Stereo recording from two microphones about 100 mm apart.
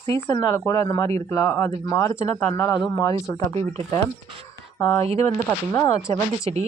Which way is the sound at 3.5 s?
90° right.